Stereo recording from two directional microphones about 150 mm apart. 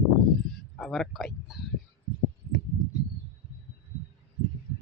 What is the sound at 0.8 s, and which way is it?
Speech, centre (ahead or behind).